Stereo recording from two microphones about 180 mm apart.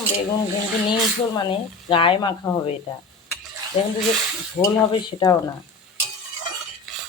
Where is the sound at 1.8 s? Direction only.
30° left (ahead or behind).